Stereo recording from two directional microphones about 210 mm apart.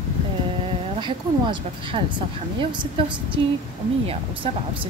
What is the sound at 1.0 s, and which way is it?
Speech, 20° right (ahead or behind).